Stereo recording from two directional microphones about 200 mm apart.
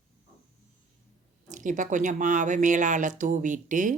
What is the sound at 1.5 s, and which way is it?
Speech, 40° right (ahead or behind).